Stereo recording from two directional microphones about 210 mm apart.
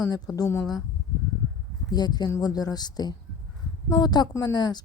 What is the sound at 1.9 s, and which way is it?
A woman's voice, 20° left (ahead or behind).